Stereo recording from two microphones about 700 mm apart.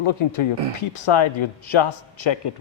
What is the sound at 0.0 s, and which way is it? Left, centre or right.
Speech, left.